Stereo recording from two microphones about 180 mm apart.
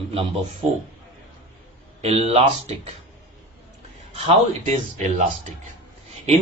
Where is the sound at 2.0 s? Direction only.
35° right (ahead or behind).